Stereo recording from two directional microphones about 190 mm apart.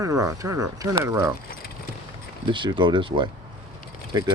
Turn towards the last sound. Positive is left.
turn(degrees=-20)  # may be behind; listen again after turning